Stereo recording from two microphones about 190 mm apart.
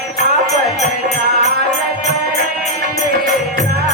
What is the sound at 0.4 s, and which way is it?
Music, 35° left (ahead or behind).